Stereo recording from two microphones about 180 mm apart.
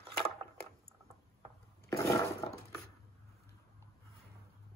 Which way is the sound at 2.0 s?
15° left (ahead or behind).